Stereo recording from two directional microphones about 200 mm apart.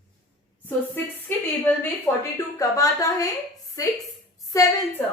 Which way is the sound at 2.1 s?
15° left (ahead or behind).